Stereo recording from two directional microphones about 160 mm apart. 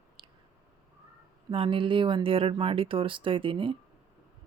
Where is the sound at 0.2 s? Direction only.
30° right (ahead or behind).